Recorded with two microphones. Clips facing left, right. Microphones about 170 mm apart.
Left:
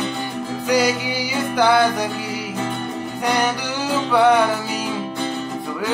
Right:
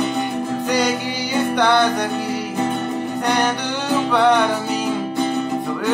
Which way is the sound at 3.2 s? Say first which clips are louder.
Even; 5° left (ahead or behind).